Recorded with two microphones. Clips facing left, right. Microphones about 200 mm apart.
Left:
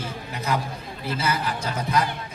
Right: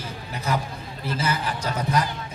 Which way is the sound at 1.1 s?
30° right (ahead or behind).